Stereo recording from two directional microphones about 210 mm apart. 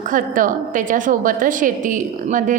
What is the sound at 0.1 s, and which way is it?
A woman's voice, 40° right (ahead or behind).